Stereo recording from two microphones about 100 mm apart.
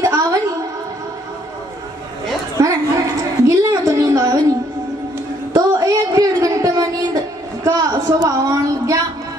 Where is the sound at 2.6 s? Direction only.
35° right (ahead or behind).